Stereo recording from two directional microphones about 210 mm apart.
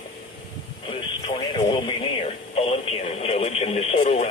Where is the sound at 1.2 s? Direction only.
25° left (ahead or behind).